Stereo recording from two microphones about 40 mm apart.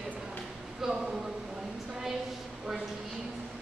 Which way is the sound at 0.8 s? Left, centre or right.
Centre.